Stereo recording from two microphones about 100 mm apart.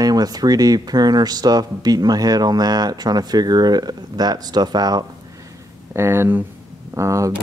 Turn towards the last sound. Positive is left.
turn(degrees=-35)  # may be behind; listen again after turning